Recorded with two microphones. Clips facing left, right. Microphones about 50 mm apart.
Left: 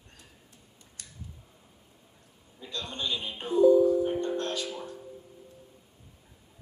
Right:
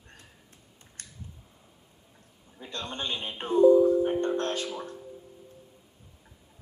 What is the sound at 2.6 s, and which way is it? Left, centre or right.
Speech, right.